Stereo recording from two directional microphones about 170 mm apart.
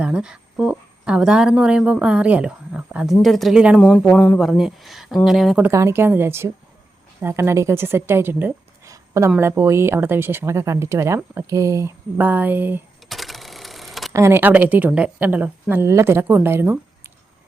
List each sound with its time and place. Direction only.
0.0 s speech: 5° right (ahead or behind)
3.8 s speech: 5° left (ahead or behind)
5.7 s a woman's voice: 15° right (ahead or behind)
13.1 s a sound: centre (ahead or behind)
14.1 s speech: 15° right (ahead or behind)